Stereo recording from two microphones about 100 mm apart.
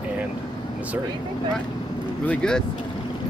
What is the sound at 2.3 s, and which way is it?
Speech, 10° left (ahead or behind).